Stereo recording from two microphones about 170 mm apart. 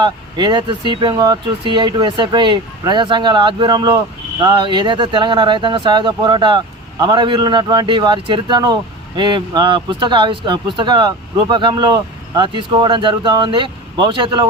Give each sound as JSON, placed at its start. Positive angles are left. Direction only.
{"t": 0.0, "sound": "speech", "side_deg": -25}